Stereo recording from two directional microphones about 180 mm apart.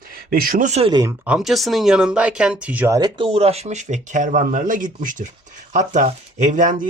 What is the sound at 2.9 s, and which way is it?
Speech, 25° right (ahead or behind).